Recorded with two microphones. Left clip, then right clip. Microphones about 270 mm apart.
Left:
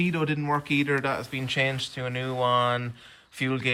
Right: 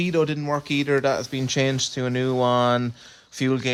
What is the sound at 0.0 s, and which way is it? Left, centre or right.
Speech, centre.